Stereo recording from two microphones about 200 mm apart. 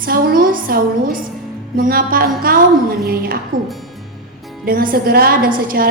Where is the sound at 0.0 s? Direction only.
45° right (ahead or behind).